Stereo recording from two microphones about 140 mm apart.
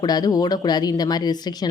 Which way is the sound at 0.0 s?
30° left (ahead or behind).